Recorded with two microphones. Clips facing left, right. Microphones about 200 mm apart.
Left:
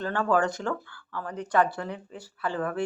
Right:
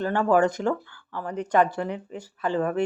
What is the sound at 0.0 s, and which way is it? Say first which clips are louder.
Speech: right 4 dB; 15° right (ahead or behind).